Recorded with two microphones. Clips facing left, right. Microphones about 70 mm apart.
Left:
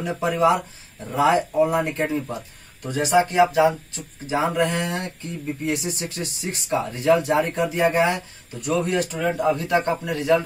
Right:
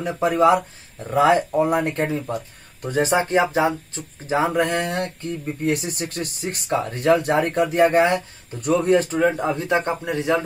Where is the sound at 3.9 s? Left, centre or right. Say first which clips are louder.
Right 2 dB; right.